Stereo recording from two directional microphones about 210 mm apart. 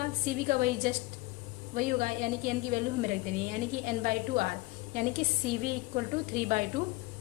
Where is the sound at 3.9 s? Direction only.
40° right (ahead or behind).